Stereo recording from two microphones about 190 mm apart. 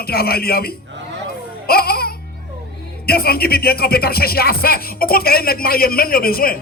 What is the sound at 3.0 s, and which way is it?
Speech, 55° left (ahead or behind).